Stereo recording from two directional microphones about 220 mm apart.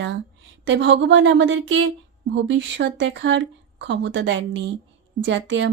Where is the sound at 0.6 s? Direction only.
55° right (ahead or behind).